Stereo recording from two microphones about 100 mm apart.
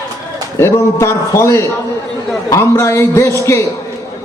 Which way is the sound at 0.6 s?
25° left (ahead or behind).